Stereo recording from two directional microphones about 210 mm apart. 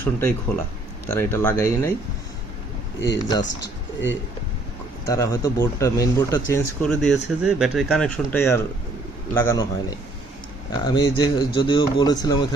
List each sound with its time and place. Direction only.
0.0 s speech: 10° left (ahead or behind)
3.1 s speech: 20° left (ahead or behind)
5.0 s speech: 15° left (ahead or behind)
6.8 s speech: centre (ahead or behind)
10.7 s speech: 20° left (ahead or behind)